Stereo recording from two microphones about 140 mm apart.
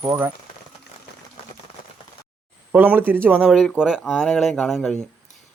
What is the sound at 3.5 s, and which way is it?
Speech, centre (ahead or behind).